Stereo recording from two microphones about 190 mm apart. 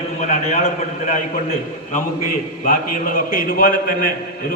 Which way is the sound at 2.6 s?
45° left (ahead or behind).